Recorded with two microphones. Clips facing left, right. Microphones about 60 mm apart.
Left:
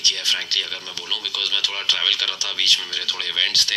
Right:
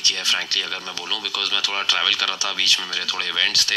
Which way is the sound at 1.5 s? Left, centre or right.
Right.